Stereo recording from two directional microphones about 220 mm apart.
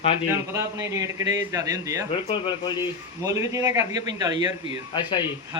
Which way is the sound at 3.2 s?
15° right (ahead or behind).